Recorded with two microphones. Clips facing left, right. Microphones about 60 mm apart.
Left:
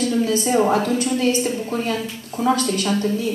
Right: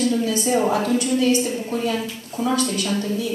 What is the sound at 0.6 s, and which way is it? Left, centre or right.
Speech, left.